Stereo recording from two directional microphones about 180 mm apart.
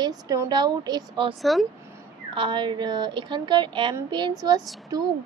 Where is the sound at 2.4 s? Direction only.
25° right (ahead or behind).